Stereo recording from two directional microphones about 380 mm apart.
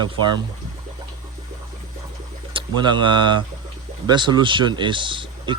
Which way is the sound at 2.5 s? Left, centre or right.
Centre.